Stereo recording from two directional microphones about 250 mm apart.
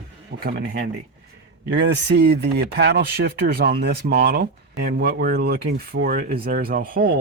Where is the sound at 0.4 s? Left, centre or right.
Right.